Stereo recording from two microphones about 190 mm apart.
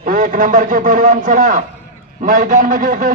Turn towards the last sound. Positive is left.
turn(degrees=-45)  # may be behind; listen again after turning